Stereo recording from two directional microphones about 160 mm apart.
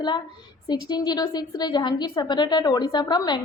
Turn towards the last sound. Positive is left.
turn(degrees=25)  # may be behind; listen again after turning